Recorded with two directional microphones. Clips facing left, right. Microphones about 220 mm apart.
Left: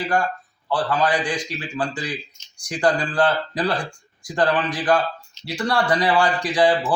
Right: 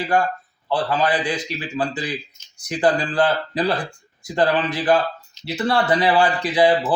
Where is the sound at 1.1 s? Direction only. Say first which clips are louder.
Right 1 dB; 5° right (ahead or behind).